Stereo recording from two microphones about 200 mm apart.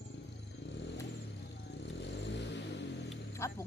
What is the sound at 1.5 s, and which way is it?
Vehicle, 60° left (ahead or behind).